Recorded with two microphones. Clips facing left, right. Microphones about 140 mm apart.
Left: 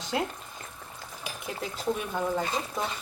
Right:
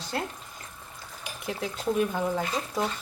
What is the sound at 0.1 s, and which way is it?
Speech, 15° left (ahead or behind).